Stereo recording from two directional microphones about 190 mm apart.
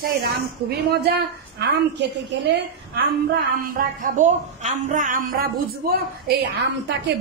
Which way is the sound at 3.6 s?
45° right (ahead or behind).